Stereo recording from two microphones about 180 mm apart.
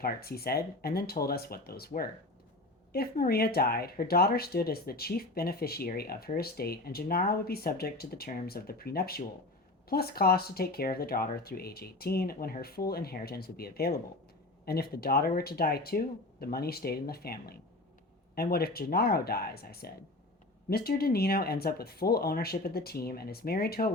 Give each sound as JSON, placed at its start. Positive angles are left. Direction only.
{"t": 0.0, "sound": "speech", "side_deg": 60}
{"t": 2.9, "sound": "speech", "side_deg": 60}